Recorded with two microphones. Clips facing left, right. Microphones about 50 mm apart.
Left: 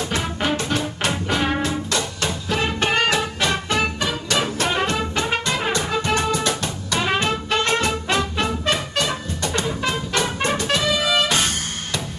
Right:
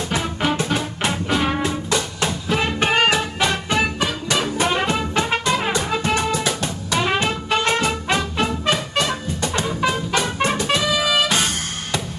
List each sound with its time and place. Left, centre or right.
0.1 s music: centre
5.4 s music: centre
10.7 s music: centre